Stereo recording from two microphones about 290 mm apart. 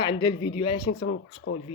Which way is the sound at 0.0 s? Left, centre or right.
Centre.